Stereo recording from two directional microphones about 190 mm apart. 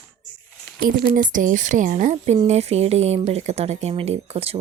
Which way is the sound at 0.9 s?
45° right (ahead or behind).